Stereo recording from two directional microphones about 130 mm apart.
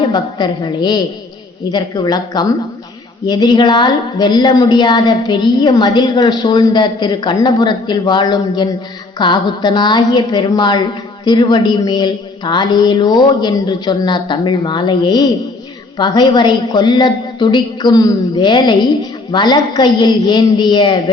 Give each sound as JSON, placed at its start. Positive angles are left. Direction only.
{"t": 0.0, "sound": "a woman's voice", "side_deg": 35}